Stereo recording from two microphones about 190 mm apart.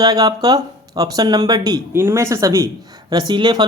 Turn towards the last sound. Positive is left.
turn(degrees=-25)  # may be behind; listen again after turning